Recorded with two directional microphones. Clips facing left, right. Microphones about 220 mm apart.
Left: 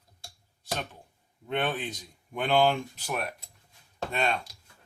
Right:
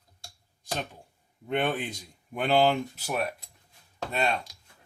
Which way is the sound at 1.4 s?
10° right (ahead or behind).